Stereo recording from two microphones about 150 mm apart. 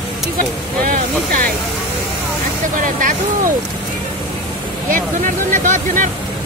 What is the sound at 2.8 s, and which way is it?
Speech, 60° right (ahead or behind).